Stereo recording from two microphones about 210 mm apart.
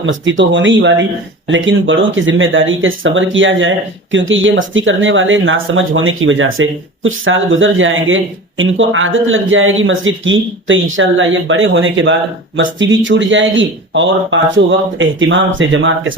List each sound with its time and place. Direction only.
0.0 s speech: 60° right (ahead or behind)